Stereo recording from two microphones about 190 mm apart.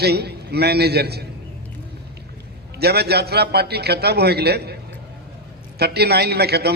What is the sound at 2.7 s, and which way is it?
A man's voice, 55° right (ahead or behind).